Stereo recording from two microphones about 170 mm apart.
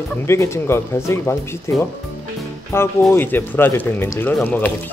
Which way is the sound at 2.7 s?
15° left (ahead or behind).